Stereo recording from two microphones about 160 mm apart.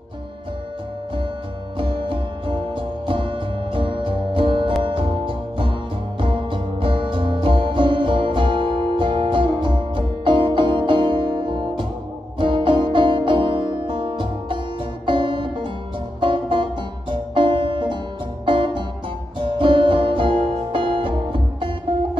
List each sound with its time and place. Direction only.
1.8 s music: 30° right (ahead or behind)